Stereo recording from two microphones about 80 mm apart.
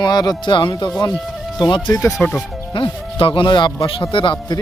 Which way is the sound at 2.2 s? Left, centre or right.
Left.